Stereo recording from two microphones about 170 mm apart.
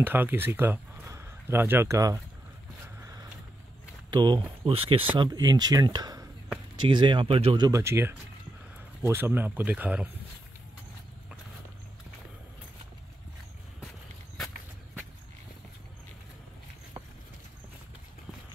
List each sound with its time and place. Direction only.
0.0 s speech: 10° right (ahead or behind)
3.0 s vehicle: 20° right (ahead or behind)
4.1 s speech: 25° right (ahead or behind); by 10.0 s 10° right (ahead or behind)